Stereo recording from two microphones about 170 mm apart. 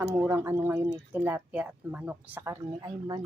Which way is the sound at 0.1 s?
15° right (ahead or behind).